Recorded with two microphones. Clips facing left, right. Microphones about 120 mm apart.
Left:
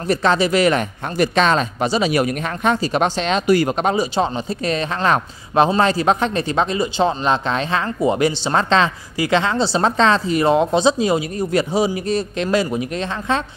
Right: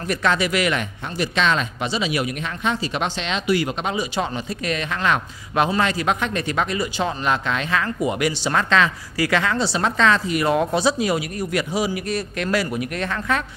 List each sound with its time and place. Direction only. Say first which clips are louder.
0.1 s speech: left 5 dB; 30° left (ahead or behind)